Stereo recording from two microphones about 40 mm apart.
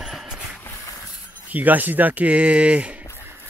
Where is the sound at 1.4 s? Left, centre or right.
Right.